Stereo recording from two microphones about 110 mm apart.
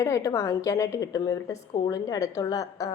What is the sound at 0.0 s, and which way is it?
A woman's voice, 30° left (ahead or behind).